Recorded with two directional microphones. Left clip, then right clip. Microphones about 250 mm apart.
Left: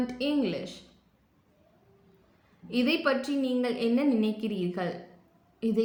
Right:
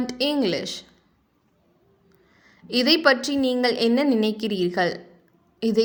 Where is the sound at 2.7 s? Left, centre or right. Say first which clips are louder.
Right 8 dB; right.